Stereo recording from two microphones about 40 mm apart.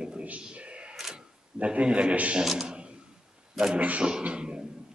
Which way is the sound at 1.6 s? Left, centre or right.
Right.